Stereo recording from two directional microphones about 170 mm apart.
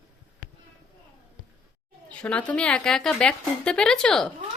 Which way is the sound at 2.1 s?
5° left (ahead or behind).